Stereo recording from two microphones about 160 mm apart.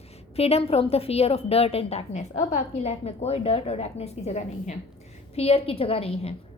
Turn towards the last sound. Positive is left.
turn(degrees=35)  # may be behind; listen again after turning